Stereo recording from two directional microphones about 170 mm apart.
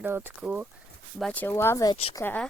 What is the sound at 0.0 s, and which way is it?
Speech, 10° right (ahead or behind).